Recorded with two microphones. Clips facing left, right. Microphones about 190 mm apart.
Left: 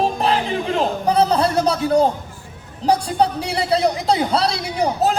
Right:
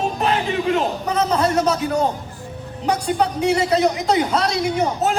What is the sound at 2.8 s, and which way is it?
A man's voice, 35° left (ahead or behind).